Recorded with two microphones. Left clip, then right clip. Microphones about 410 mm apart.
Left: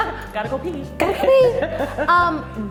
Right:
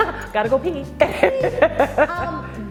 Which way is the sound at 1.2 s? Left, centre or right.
Right.